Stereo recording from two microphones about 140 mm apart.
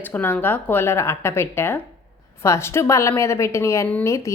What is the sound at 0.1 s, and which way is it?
A woman's voice, 15° left (ahead or behind).